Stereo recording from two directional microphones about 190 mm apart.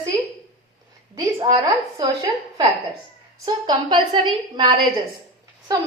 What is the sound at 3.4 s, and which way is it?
A woman's voice, 20° right (ahead or behind).